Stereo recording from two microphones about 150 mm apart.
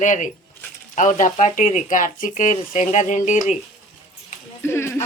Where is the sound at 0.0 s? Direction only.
55° left (ahead or behind).